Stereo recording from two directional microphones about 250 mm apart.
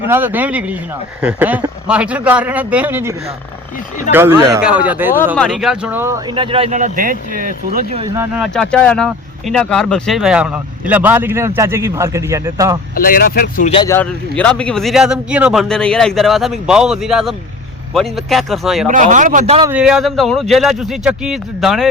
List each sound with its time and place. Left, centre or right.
0.1 s a man's voice: centre; by 8.0 s right
8.4 s speech: centre
12.9 s speech: left
13.8 s speech: centre
18.9 s a man's voice: right
19.6 s speech: centre